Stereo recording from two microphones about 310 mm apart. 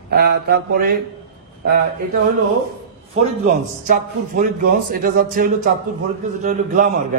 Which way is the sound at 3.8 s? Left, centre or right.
Right.